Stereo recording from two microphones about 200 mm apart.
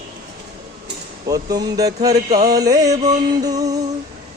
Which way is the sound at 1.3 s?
20° right (ahead or behind).